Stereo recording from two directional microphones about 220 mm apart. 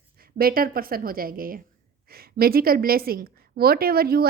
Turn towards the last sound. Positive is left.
turn(degrees=-45)  # may be behind; listen again after turning